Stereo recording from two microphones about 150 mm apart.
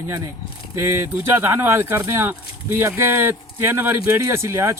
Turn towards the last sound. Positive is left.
turn(degrees=-20)  # may be behind; listen again after turning